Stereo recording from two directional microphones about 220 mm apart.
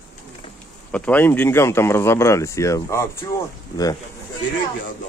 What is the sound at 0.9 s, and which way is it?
Speech, 5° left (ahead or behind).